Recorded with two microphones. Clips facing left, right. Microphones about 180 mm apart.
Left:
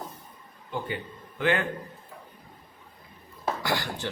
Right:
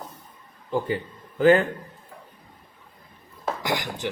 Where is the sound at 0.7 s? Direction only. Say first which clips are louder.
Right 7 dB; 35° right (ahead or behind).